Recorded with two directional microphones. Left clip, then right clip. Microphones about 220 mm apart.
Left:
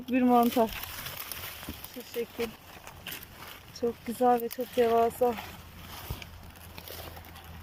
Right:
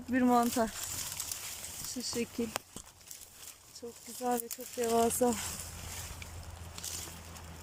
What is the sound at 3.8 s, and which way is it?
Speech, 5° right (ahead or behind).